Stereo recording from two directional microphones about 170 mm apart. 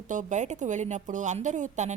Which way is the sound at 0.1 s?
45° right (ahead or behind).